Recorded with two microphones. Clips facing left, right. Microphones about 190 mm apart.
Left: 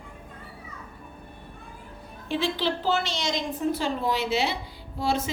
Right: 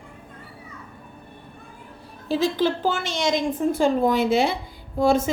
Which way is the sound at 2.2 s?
40° right (ahead or behind).